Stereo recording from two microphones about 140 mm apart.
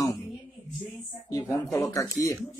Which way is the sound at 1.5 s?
5° left (ahead or behind).